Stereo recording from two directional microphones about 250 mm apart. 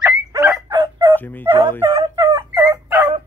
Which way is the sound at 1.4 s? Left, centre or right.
Centre.